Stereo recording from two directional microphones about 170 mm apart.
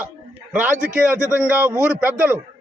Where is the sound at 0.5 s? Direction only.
5° right (ahead or behind).